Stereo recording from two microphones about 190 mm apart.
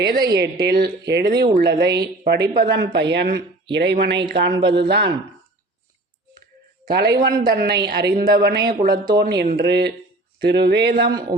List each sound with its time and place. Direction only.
0.0 s a woman's voice: 55° right (ahead or behind)
6.9 s a woman's voice: 60° right (ahead or behind)